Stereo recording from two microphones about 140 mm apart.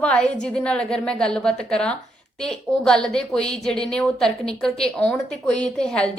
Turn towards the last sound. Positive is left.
turn(degrees=5)  # may be behind; listen again after turning